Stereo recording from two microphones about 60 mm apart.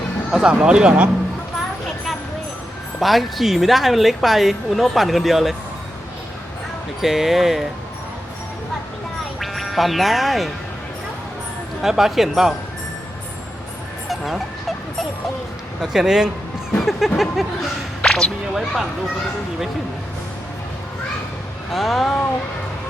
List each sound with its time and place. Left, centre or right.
0.3 s speech: centre
3.0 s speech: centre
7.0 s speech: centre
9.4 s speech: centre
11.8 s speech: centre
14.1 s fowl: centre
15.8 s speech: centre
18.0 s music: centre
18.5 s speech: centre
21.7 s speech: centre